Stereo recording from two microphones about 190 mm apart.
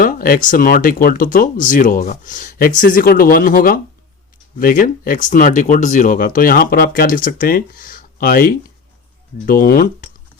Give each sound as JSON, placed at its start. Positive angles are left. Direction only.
{"t": 0.0, "sound": "speech", "side_deg": 45}